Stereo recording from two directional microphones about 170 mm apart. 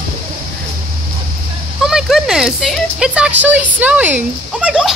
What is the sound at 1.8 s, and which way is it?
Speech, centre (ahead or behind).